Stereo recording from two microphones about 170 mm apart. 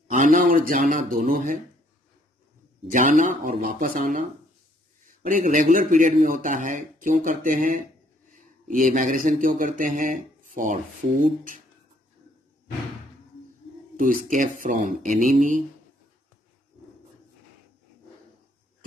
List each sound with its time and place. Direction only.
0.1 s a man's voice: 50° right (ahead or behind)
2.9 s speech: 50° right (ahead or behind)
13.9 s speech: 50° right (ahead or behind)